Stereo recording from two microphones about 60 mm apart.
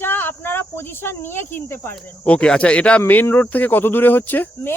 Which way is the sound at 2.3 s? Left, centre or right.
Centre.